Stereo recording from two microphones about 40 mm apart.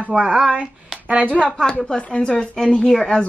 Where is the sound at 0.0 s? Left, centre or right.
Right.